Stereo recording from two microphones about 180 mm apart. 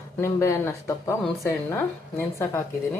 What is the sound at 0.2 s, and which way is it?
Speech, 15° left (ahead or behind).